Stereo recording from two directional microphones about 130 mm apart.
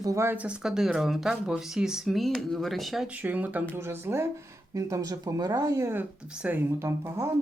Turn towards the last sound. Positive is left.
turn(degrees=-20)  # may be behind; listen again after turning